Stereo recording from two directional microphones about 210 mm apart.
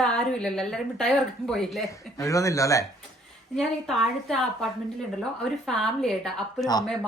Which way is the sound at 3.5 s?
Centre (ahead or behind).